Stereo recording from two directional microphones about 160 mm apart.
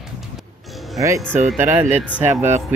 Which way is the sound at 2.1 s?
10° right (ahead or behind).